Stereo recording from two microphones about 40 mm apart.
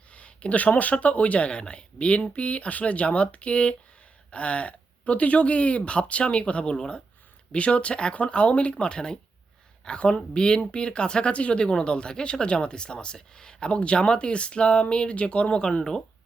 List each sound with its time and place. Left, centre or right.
0.1 s speech: left
15.8 s speech: centre